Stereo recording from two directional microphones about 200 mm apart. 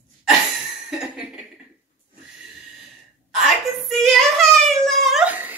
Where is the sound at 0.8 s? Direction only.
5° right (ahead or behind).